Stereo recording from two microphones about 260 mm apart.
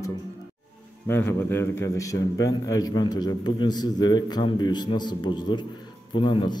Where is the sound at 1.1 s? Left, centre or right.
Centre.